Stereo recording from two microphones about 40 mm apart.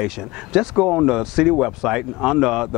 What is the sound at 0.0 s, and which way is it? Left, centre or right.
Speech, centre.